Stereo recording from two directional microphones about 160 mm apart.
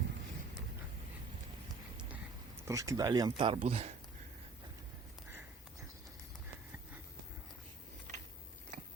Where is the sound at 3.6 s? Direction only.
40° right (ahead or behind).